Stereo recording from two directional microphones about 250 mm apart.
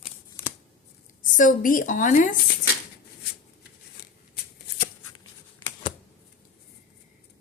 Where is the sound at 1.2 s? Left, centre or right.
Left.